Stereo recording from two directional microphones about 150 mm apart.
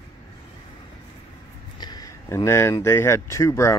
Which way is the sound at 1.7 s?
25° left (ahead or behind).